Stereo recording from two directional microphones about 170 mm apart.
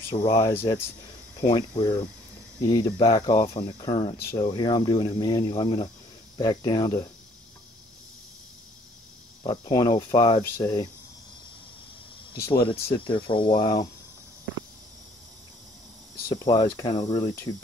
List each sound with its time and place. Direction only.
0.1 s speech: 20° left (ahead or behind)
1.5 s speech: 25° left (ahead or behind)
9.4 s speech: 25° left (ahead or behind)
10.6 s speech: 20° left (ahead or behind)
12.5 s speech: 30° left (ahead or behind)
16.3 s speech: 20° left (ahead or behind)